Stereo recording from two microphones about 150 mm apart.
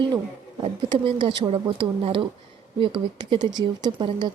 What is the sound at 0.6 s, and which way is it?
Speech, 35° right (ahead or behind).